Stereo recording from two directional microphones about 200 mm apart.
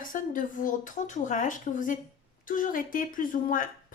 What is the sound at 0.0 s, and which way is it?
A woman's voice, 40° left (ahead or behind).